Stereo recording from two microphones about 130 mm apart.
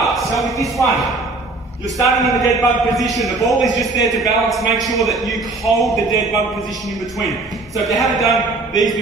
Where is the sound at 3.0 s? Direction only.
Centre (ahead or behind).